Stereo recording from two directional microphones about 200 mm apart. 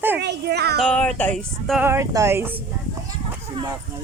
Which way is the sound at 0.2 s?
55° right (ahead or behind).